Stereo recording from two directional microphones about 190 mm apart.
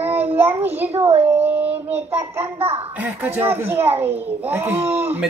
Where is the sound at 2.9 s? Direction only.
10° right (ahead or behind).